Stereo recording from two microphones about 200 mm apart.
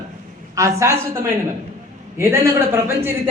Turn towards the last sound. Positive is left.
turn(degrees=-10)  # may be behind; listen again after turning